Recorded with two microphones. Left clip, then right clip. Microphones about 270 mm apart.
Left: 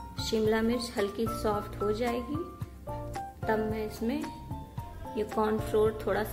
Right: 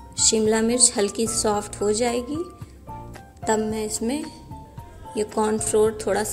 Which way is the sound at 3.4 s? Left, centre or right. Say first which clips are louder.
Right 7 dB; centre.